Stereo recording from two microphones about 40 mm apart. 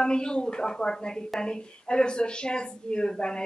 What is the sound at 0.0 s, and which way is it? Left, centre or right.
Speech, left.